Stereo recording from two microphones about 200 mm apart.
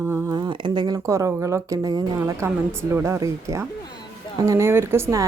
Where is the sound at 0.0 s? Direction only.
15° right (ahead or behind).